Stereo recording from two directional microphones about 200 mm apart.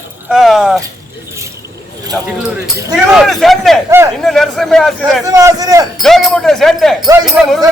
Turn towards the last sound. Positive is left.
turn(degrees=-5)  # may be behind; listen again after turning